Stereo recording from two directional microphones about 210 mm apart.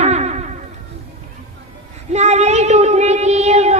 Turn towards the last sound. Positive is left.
turn(degrees=-30)  # may be behind; listen again after turning